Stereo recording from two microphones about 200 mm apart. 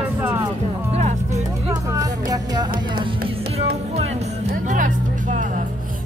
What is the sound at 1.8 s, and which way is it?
Music, 15° right (ahead or behind).